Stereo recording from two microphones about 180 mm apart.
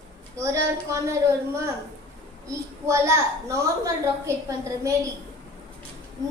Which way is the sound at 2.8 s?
15° right (ahead or behind).